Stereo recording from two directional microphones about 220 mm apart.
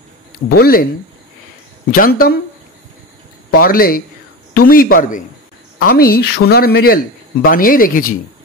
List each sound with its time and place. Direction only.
0.6 s a woman's voice: 45° left (ahead or behind)
1.9 s speech: 40° left (ahead or behind)
3.5 s a woman's voice: 40° left (ahead or behind)